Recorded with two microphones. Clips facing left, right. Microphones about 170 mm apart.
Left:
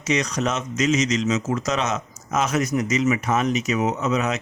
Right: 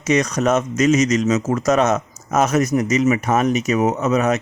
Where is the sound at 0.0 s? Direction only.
50° right (ahead or behind).